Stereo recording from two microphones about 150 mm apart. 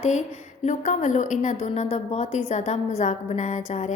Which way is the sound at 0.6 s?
55° left (ahead or behind).